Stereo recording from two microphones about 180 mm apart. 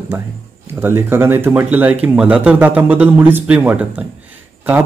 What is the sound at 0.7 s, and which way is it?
Speech, 10° right (ahead or behind).